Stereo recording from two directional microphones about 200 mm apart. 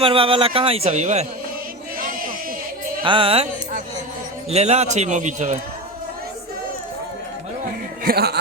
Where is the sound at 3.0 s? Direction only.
25° right (ahead or behind).